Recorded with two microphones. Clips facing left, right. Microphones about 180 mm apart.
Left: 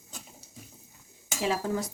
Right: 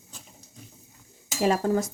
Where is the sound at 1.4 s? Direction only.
45° right (ahead or behind).